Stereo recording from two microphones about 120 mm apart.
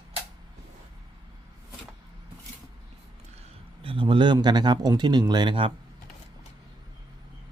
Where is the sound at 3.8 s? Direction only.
45° right (ahead or behind).